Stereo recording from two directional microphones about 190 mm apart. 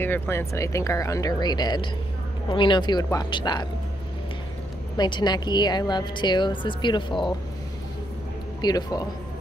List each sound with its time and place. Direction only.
0.0 s a woman's voice: 10° left (ahead or behind)
4.9 s a woman's voice: 20° left (ahead or behind)
8.5 s a woman's voice: 20° left (ahead or behind)